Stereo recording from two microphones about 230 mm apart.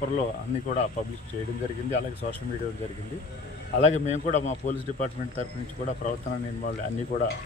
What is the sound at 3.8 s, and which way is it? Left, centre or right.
A man's voice, left.